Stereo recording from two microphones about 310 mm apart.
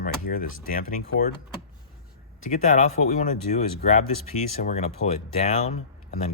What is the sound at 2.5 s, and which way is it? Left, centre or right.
Speech, left.